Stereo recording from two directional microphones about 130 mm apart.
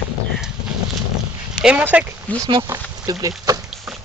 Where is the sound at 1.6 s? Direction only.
10° right (ahead or behind).